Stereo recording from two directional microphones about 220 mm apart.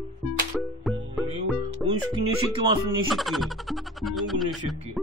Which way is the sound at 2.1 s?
25° right (ahead or behind).